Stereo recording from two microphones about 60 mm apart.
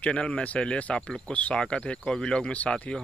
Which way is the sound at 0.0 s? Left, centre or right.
Centre.